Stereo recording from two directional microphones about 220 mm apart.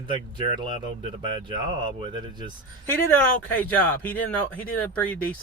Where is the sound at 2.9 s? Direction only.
10° left (ahead or behind).